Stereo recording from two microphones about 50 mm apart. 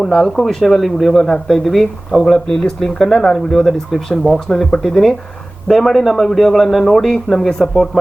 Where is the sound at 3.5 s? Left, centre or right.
Centre.